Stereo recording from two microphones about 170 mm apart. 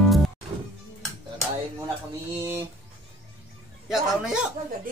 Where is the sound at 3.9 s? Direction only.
5° right (ahead or behind).